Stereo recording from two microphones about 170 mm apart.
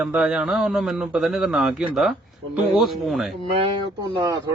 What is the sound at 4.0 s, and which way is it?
Speech, 25° right (ahead or behind).